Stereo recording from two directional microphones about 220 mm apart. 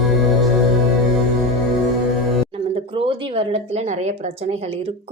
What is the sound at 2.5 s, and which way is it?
A woman's voice, 25° right (ahead or behind).